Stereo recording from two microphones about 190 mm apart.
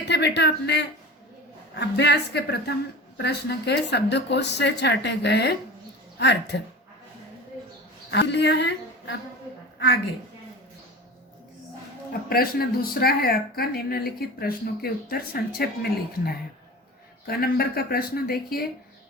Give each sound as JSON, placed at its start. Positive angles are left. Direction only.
{"t": 0.1, "sound": "a woman's voice", "side_deg": 65}
{"t": 8.1, "sound": "a woman's voice", "side_deg": 65}
{"t": 12.3, "sound": "speech", "side_deg": 50}